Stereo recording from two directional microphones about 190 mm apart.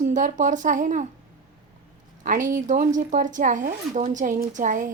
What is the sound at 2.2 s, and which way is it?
Speech, 45° right (ahead or behind).